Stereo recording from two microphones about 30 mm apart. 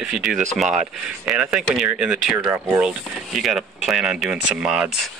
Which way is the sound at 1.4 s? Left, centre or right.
Right.